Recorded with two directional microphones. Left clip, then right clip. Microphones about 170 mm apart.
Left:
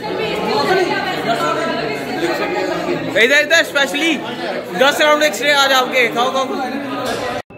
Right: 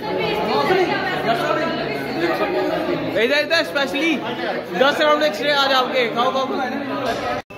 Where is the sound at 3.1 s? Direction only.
Centre (ahead or behind).